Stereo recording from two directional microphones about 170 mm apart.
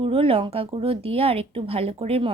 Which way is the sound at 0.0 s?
35° right (ahead or behind).